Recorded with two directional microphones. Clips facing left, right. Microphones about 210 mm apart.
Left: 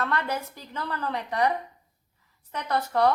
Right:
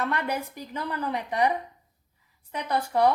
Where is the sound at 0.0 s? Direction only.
15° right (ahead or behind).